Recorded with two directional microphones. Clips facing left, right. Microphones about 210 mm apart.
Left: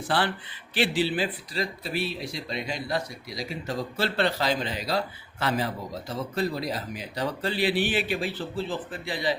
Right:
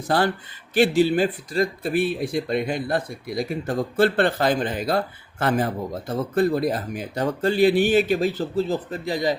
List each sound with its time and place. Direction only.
0.1 s speech: 45° right (ahead or behind)